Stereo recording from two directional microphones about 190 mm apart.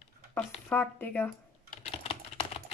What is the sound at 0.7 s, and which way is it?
Speech, 10° left (ahead or behind).